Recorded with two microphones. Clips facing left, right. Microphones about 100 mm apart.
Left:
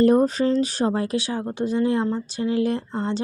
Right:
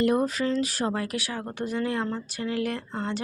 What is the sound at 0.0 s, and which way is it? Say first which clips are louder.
Speech: left 6 dB; 35° left (ahead or behind).